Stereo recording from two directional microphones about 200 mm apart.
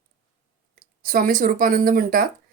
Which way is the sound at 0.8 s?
45° right (ahead or behind).